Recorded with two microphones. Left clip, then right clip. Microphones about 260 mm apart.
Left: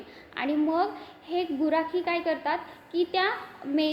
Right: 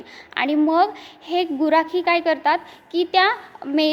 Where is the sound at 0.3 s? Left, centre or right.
Right.